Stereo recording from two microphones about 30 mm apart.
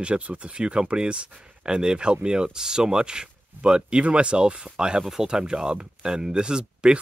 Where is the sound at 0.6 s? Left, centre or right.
Right.